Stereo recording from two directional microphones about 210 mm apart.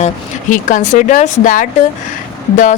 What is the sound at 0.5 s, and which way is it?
Speech, 35° left (ahead or behind).